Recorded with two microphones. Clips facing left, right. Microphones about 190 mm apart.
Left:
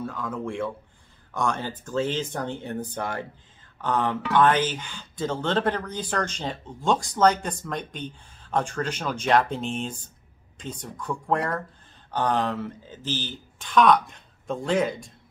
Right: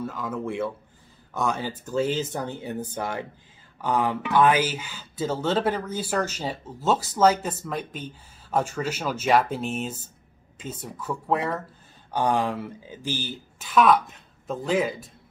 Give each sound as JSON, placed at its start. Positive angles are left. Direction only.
{"t": 0.0, "sound": "speech", "side_deg": -5}